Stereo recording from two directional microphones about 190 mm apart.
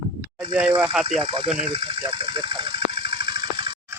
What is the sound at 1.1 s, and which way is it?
Speech, 30° right (ahead or behind).